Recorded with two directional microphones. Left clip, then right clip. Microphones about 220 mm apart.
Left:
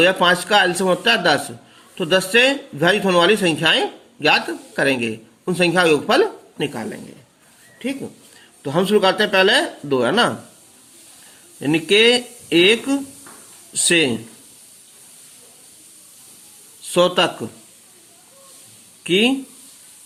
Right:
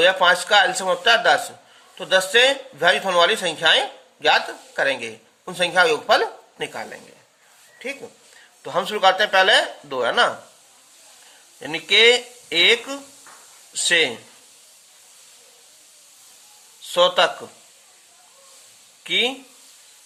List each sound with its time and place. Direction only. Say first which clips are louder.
0.0 s speech: left 1 dB; 5° left (ahead or behind)
8.6 s speech: left 2 dB; 10° left (ahead or behind)
11.6 s speech: left 1 dB; 10° left (ahead or behind)
16.9 s speech: left 1 dB; 10° left (ahead or behind)
19.0 s speech: left 4 dB; 10° left (ahead or behind)